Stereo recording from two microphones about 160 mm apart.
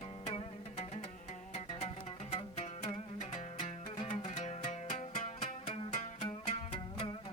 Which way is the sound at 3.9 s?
40° left (ahead or behind).